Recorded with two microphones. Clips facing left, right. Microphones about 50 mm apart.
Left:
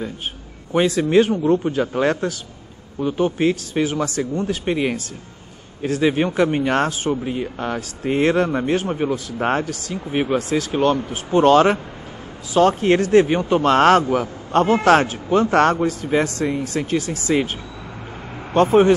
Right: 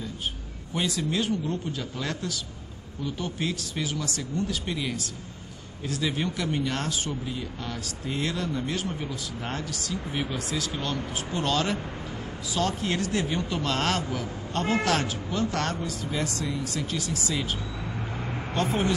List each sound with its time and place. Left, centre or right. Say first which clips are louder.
0.7 s speech: left 12 dB; left
18.5 s speech: left 13 dB; left